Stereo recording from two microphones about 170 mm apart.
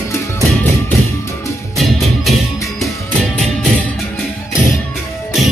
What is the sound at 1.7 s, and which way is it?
Music, centre (ahead or behind).